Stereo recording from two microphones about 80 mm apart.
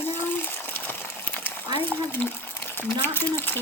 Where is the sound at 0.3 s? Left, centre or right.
Left.